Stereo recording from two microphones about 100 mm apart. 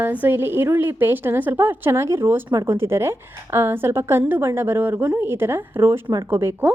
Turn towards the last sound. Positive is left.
turn(degrees=-25)  # may be behind; listen again after turning